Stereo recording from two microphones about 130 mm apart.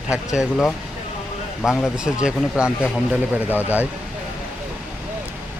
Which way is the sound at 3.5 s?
15° left (ahead or behind).